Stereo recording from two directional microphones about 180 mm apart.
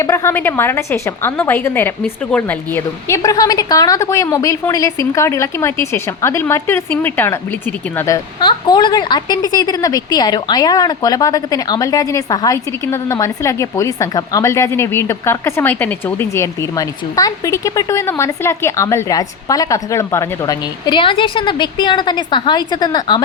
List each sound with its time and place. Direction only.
0.0 s a woman's voice: 15° left (ahead or behind)